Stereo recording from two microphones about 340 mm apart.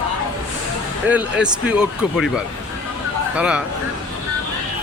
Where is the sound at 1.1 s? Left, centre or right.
Centre.